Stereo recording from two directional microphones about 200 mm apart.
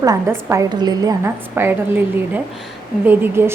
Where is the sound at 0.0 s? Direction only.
15° right (ahead or behind).